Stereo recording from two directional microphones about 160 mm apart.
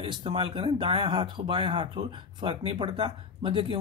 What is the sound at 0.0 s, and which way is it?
Speech, 30° right (ahead or behind).